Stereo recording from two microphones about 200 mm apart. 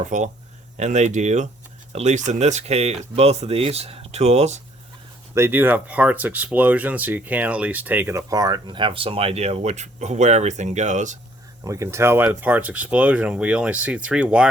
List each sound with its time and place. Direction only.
0.0 s speech: 40° right (ahead or behind)
5.3 s speech: 10° right (ahead or behind); by 11.2 s 35° right (ahead or behind)
11.6 s speech: 15° right (ahead or behind)